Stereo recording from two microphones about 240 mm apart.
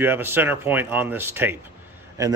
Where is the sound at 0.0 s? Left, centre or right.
Centre.